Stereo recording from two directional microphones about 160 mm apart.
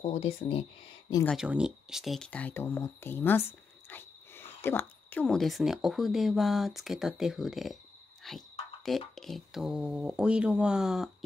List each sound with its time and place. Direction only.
0.0 s speech: 35° left (ahead or behind)
1.3 s speech: 5° right (ahead or behind); by 5.2 s 15° left (ahead or behind)
5.2 s speech: centre (ahead or behind)